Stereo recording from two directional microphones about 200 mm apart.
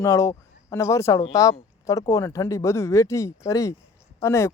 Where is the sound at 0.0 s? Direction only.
15° left (ahead or behind).